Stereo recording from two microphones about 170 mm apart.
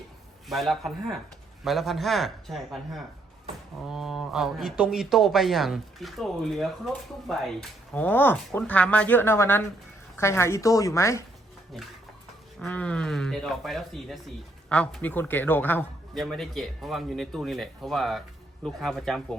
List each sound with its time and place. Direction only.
0.4 s a man's voice: centre (ahead or behind); by 11.2 s 15° left (ahead or behind)
12.5 s a man's voice: 5° left (ahead or behind)